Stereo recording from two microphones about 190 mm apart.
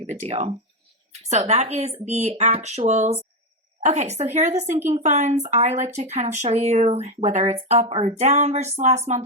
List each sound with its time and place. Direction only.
0.1 s speech: 35° right (ahead or behind)